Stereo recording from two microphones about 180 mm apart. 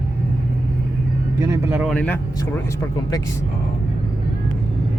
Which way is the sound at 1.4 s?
10° right (ahead or behind).